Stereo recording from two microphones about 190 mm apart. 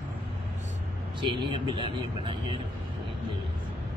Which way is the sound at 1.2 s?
25° right (ahead or behind).